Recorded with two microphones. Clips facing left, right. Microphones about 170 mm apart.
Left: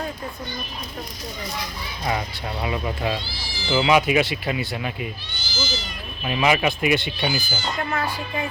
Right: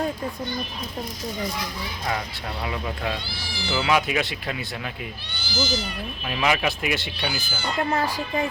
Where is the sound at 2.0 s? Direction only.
5° left (ahead or behind).